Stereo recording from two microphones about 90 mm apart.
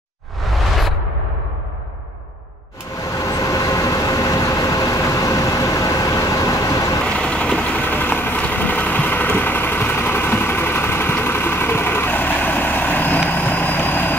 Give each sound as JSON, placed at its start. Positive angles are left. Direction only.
{"t": 0.5, "sound": "a sound", "side_deg": 0}
{"t": 3.3, "sound": "vehicle", "side_deg": 40}
{"t": 7.1, "sound": "vehicle", "side_deg": 10}